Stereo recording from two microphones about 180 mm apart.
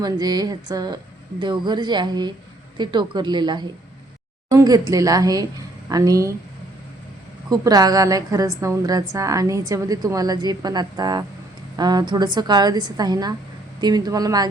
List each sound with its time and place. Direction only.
0.0 s a woman's voice: 25° right (ahead or behind)
7.5 s a woman's voice: 20° right (ahead or behind)